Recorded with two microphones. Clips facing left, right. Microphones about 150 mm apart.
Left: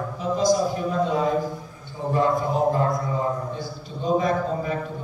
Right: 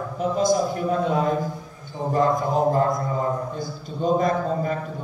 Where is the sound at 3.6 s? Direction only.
45° right (ahead or behind).